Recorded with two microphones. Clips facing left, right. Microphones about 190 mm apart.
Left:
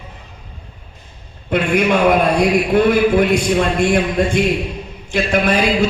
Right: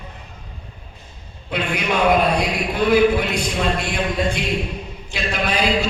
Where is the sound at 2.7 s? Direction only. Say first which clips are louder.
Left 1 dB; 50° left (ahead or behind).